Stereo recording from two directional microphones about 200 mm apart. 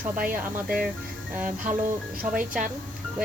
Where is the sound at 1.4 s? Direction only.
40° right (ahead or behind).